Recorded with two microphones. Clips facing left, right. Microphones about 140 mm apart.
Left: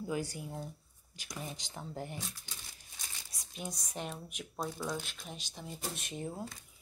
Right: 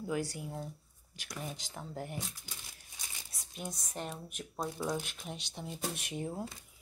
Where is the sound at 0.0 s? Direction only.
Centre (ahead or behind).